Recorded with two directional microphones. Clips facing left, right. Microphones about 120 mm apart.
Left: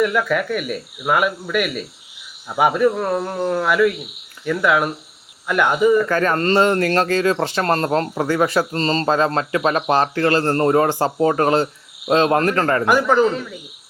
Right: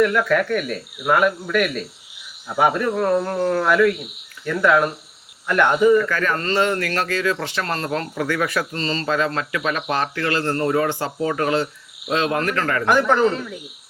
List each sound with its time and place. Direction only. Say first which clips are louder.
0.0 s speech: right 1 dB; 5° left (ahead or behind)
6.1 s speech: left 5 dB; 40° left (ahead or behind)
12.8 s speech: right 1 dB; 5° left (ahead or behind)